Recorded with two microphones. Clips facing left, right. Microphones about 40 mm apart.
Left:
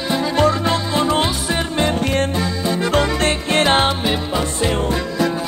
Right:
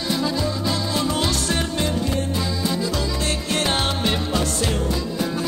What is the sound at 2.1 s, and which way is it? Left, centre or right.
Music, left.